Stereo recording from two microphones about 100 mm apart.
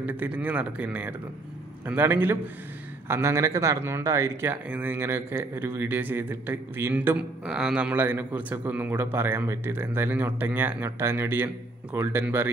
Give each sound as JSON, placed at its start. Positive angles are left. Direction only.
{"t": 0.0, "sound": "a man's voice", "side_deg": -15}
{"t": 4.5, "sound": "a man's voice", "side_deg": -20}
{"t": 8.0, "sound": "a man's voice", "side_deg": -20}